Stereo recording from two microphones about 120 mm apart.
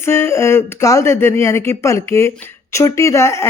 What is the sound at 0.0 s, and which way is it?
Speech, 20° left (ahead or behind).